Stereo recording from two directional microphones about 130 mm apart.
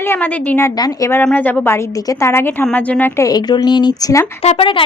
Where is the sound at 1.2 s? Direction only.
15° left (ahead or behind).